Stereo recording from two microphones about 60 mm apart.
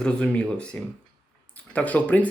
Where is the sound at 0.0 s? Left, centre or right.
Centre.